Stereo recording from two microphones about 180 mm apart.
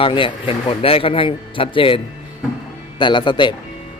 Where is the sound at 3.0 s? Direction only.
25° left (ahead or behind).